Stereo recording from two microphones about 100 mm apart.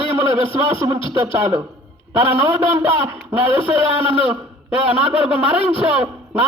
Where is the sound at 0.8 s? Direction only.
40° right (ahead or behind).